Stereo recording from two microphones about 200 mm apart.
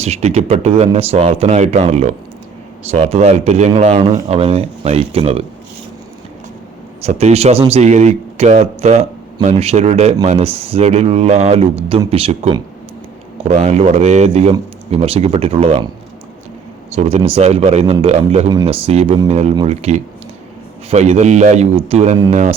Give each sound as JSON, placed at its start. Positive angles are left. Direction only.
{"t": 0.0, "sound": "speech", "side_deg": -30}
{"t": 7.0, "sound": "speech", "side_deg": -30}
{"t": 16.9, "sound": "speech", "side_deg": -35}